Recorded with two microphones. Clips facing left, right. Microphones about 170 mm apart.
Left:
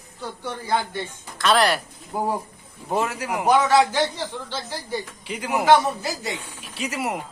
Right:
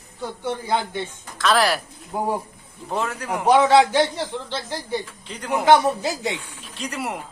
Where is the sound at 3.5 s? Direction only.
25° right (ahead or behind).